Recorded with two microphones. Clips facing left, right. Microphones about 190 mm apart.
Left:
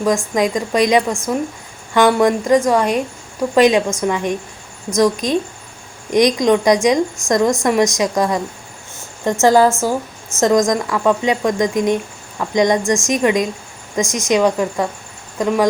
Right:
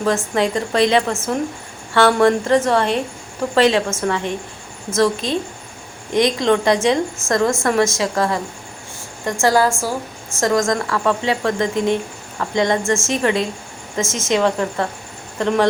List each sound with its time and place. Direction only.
0.0 s a woman's voice: 15° left (ahead or behind)